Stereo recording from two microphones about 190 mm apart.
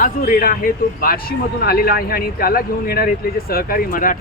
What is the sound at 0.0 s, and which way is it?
A man's voice, 45° left (ahead or behind).